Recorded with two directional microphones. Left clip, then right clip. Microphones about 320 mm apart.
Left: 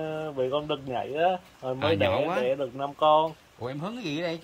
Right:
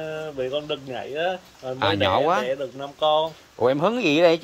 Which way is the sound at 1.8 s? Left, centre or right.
Centre.